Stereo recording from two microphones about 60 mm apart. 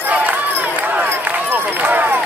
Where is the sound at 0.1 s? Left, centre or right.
Right.